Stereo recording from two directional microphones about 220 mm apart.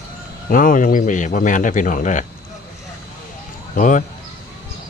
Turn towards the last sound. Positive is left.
turn(degrees=35)  # may be behind; listen again after turning